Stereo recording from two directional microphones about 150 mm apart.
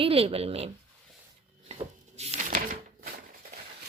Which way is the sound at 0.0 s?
40° right (ahead or behind).